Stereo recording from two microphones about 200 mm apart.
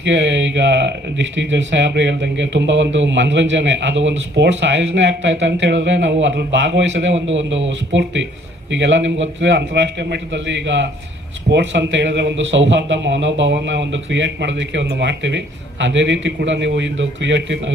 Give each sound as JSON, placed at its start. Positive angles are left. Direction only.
{"t": 0.0, "sound": "speech", "side_deg": -65}